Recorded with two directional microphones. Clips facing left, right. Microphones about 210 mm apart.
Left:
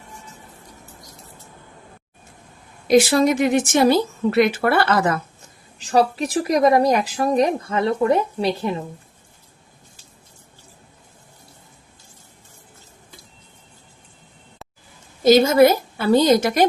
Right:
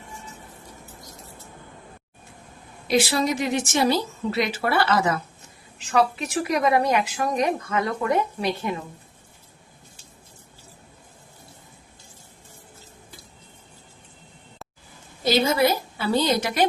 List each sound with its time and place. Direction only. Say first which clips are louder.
2.8 s a woman's voice: left 7 dB; 45° left (ahead or behind)
5.8 s speech: left 4 dB; 35° left (ahead or behind)
15.2 s a woman's voice: left 8 dB; 45° left (ahead or behind)